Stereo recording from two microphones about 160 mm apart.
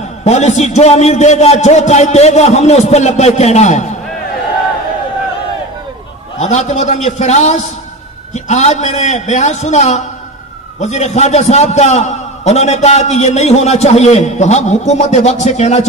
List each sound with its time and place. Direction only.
0.2 s a man's voice: 45° left (ahead or behind)
6.4 s a man's voice: 45° left (ahead or behind)